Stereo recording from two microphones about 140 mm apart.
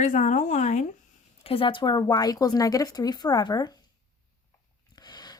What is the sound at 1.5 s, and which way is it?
Speech, 40° left (ahead or behind).